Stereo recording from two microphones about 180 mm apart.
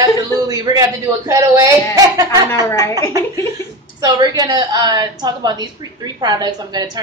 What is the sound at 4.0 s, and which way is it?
A woman's voice, 20° right (ahead or behind).